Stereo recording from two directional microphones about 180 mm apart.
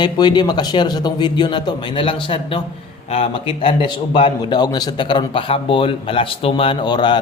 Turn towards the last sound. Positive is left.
turn(degrees=25)  # may be behind; listen again after turning